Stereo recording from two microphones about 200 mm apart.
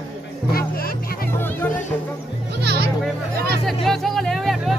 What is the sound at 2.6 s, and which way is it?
Music, 55° right (ahead or behind).